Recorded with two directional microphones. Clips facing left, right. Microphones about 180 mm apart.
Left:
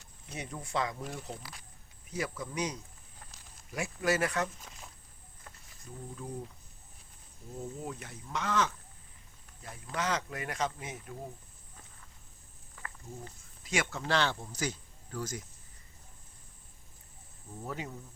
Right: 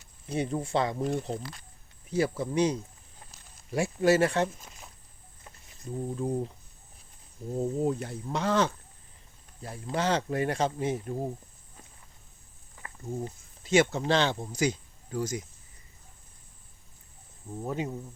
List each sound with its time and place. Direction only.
0.3 s speech: 30° right (ahead or behind)
1.4 s speech: 10° left (ahead or behind)
2.0 s speech: 30° right (ahead or behind)
5.5 s wild animals: 25° right (ahead or behind)
7.6 s speech: 35° right (ahead or behind)
12.7 s speech: 25° right (ahead or behind)
17.6 s speech: 20° right (ahead or behind)